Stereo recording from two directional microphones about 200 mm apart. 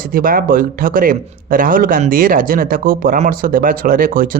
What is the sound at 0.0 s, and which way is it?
Speech, 45° right (ahead or behind).